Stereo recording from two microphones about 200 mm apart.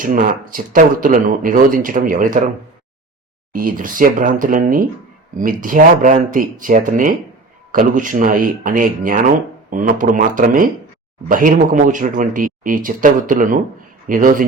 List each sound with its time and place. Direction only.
0.0 s speech: 45° right (ahead or behind)
3.5 s speech: 45° right (ahead or behind)